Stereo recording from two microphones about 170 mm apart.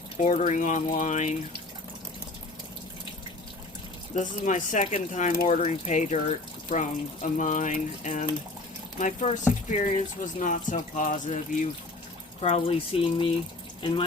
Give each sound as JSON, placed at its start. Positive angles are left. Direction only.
{"t": 0.2, "sound": "speech", "side_deg": 40}
{"t": 4.1, "sound": "speech", "side_deg": 50}